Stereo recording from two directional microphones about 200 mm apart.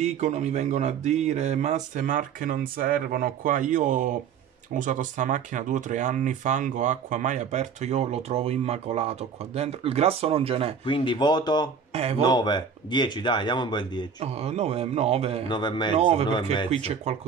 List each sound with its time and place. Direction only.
0.0 s speech: 35° right (ahead or behind)
10.9 s speech: 25° left (ahead or behind)
11.9 s speech: 30° right (ahead or behind)
12.2 s speech: 20° left (ahead or behind)
14.2 s speech: 30° right (ahead or behind)
15.4 s speech: 20° left (ahead or behind)
15.9 s speech: 30° right (ahead or behind)